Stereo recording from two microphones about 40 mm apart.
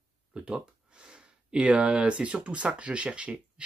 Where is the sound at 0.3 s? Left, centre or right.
Right.